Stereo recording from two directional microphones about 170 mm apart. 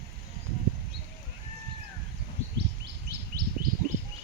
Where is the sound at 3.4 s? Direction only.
65° right (ahead or behind).